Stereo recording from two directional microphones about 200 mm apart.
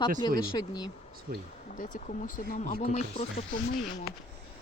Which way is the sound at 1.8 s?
40° left (ahead or behind).